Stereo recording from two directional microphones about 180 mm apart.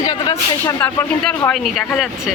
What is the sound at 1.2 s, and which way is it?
Speech, 5° left (ahead or behind).